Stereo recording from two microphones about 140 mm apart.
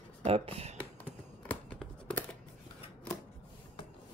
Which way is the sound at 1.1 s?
10° left (ahead or behind).